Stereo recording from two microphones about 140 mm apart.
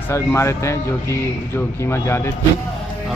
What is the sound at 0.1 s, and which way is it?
Speech, 20° left (ahead or behind).